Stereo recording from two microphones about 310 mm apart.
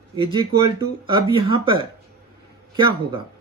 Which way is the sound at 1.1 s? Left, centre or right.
Centre.